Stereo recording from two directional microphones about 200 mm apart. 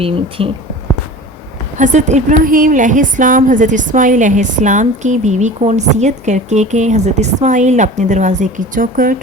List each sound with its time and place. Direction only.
0.4 s speech: 30° right (ahead or behind)
1.8 s a woman's voice: 35° right (ahead or behind)